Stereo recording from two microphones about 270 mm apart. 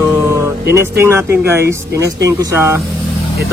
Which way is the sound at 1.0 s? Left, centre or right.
Centre.